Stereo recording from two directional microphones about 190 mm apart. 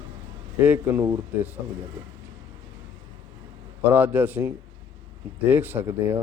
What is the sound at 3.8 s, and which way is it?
Speech, 10° right (ahead or behind).